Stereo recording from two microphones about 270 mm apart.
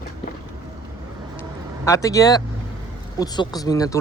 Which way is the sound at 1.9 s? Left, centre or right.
Centre.